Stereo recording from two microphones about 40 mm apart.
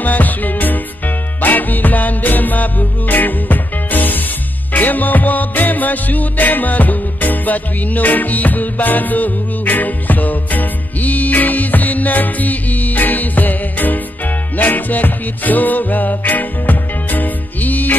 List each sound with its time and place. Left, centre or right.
0.0 s music: left